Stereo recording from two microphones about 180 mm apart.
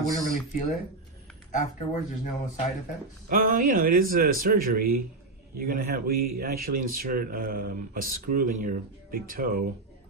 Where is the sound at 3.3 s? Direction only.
50° right (ahead or behind).